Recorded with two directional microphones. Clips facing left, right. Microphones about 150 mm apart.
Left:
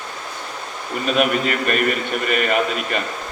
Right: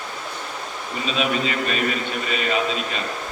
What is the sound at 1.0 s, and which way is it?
A man's voice, 55° left (ahead or behind).